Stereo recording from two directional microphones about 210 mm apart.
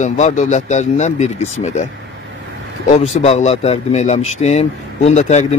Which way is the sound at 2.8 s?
30° left (ahead or behind).